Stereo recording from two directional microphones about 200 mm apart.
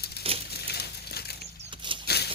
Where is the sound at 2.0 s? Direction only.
55° left (ahead or behind).